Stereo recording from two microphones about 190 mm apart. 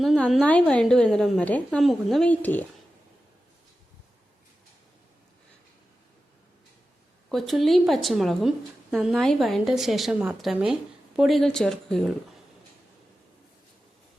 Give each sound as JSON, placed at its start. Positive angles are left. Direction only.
{"t": 0.0, "sound": "a woman's voice", "side_deg": 0}
{"t": 7.3, "sound": "a woman's voice", "side_deg": 0}